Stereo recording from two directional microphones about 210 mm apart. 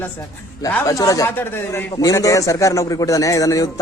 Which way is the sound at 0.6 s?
15° left (ahead or behind).